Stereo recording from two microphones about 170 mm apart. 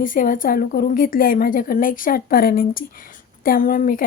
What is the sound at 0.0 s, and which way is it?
A woman's voice, 50° left (ahead or behind).